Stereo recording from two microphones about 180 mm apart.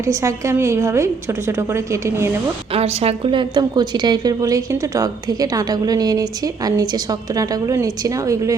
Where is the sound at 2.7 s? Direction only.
35° right (ahead or behind).